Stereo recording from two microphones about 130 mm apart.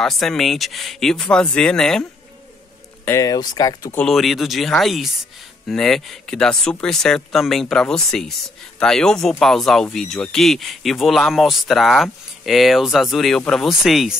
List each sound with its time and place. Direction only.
0.0 s speech: centre (ahead or behind)
3.1 s speech: 30° left (ahead or behind)
3.9 s speech: 5° left (ahead or behind)